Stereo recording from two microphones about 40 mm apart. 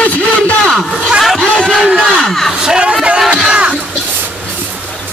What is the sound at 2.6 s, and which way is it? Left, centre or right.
Speech, centre.